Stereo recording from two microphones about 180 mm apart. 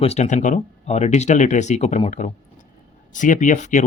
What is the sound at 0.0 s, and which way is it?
Speech, 35° left (ahead or behind).